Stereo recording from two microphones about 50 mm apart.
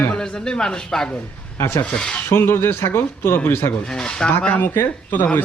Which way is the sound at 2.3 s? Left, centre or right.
Left.